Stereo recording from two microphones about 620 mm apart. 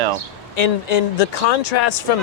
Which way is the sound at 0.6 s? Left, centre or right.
Left.